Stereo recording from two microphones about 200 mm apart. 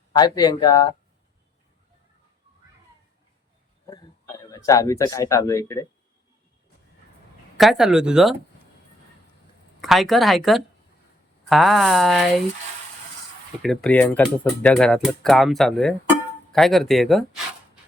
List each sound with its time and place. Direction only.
0.1 s speech: 20° left (ahead or behind)
3.8 s speech: 15° left (ahead or behind)
7.5 s speech: centre (ahead or behind)
9.8 s speech: centre (ahead or behind)
13.6 s speech: 5° left (ahead or behind)